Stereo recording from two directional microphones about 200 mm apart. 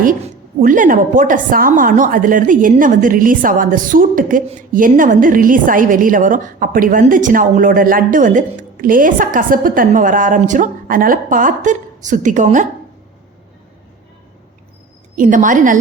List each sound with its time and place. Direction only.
0.6 s a woman's voice: 40° right (ahead or behind)
15.1 s a woman's voice: 40° right (ahead or behind)